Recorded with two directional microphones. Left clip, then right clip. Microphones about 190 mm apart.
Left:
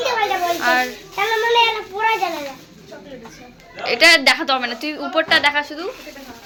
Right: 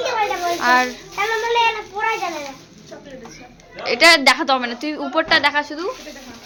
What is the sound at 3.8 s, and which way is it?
A woman's voice, 15° right (ahead or behind).